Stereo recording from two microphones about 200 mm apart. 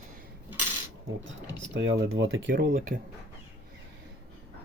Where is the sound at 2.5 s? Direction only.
45° right (ahead or behind).